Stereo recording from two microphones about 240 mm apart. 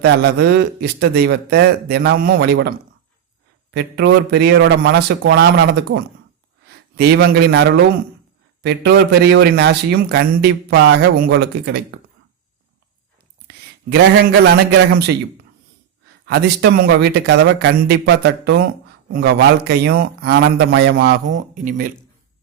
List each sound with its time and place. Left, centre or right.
0.0 s a man's voice: right
16.2 s a man's voice: right
21.2 s speech: right